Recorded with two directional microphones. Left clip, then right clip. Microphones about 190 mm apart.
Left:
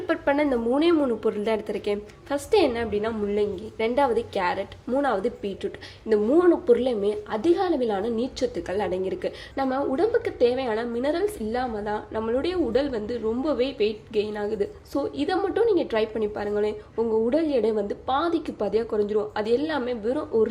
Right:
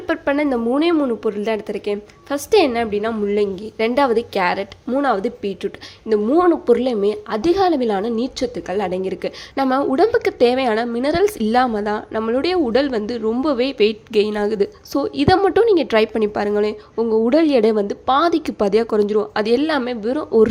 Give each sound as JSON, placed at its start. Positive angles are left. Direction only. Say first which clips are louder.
{"t": 0.1, "sound": "a woman's voice", "louder": "right 4 dB", "side_deg": -20}